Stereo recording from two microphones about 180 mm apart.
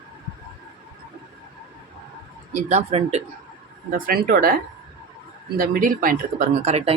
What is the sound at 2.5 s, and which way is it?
Speech, 35° right (ahead or behind).